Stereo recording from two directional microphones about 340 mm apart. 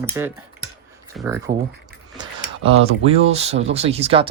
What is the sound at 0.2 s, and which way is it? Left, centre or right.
Speech, centre.